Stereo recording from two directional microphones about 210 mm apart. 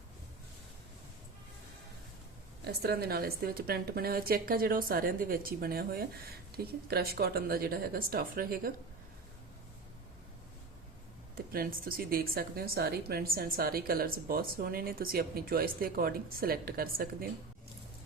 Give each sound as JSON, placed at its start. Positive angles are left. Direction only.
{"t": 2.6, "sound": "a woman's voice", "side_deg": -50}
{"t": 11.5, "sound": "a woman's voice", "side_deg": -45}